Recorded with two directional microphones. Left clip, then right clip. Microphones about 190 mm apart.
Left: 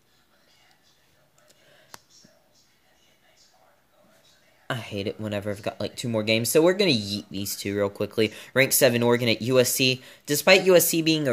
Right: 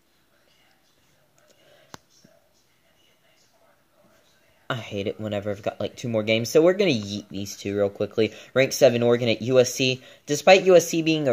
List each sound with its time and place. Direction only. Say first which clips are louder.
1.9 s whispering: right 2 dB; 30° right (ahead or behind)
4.6 s speech: right 2 dB; 15° right (ahead or behind)